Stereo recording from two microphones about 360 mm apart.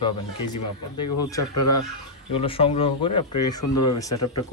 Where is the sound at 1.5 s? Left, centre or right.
Left.